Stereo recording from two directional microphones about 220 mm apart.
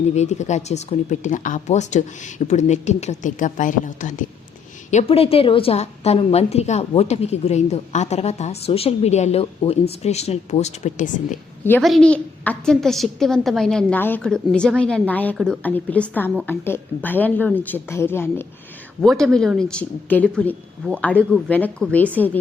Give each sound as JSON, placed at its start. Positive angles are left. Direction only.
{"t": 0.1, "sound": "a woman's voice", "side_deg": 30}
{"t": 11.6, "sound": "a woman's voice", "side_deg": 5}